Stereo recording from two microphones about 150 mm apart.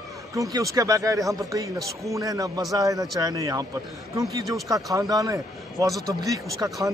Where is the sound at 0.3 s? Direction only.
20° right (ahead or behind).